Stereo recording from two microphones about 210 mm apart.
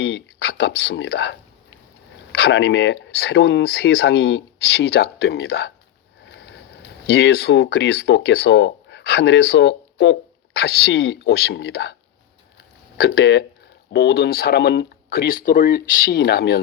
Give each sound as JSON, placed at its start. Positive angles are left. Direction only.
{"t": 0.0, "sound": "speech", "side_deg": 55}
{"t": 6.2, "sound": "sniff", "side_deg": 55}
{"t": 7.1, "sound": "speech", "side_deg": 55}
{"t": 13.0, "sound": "speech", "side_deg": 50}